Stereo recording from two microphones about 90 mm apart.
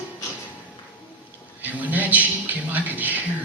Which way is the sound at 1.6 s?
20° right (ahead or behind).